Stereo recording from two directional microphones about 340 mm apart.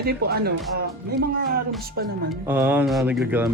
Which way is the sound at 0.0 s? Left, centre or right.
Right.